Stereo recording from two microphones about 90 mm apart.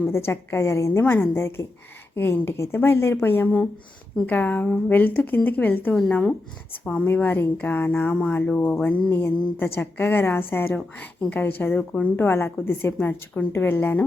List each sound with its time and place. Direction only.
0.3 s speech: 30° left (ahead or behind)
6.0 s speech: 10° left (ahead or behind)
7.0 s speech: 20° left (ahead or behind)